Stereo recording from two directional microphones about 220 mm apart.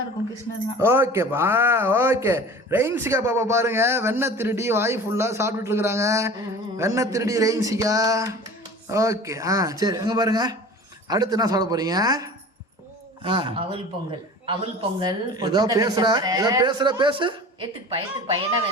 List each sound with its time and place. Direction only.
0.8 s a man's voice: 10° right (ahead or behind)